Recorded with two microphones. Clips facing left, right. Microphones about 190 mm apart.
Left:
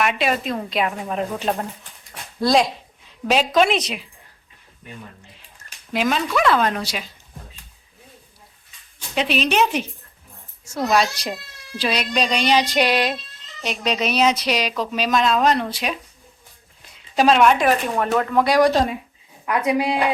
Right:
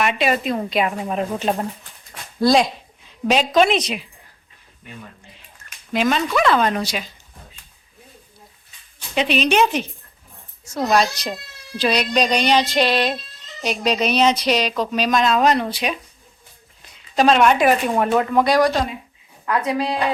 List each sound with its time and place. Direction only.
0.0 s speech: centre (ahead or behind)
5.9 s speech: 5° left (ahead or behind)
9.1 s speech: centre (ahead or behind)
12.6 s music: 15° left (ahead or behind)
13.7 s speech: centre (ahead or behind)
17.7 s speech: 10° right (ahead or behind)
19.5 s music: 15° left (ahead or behind)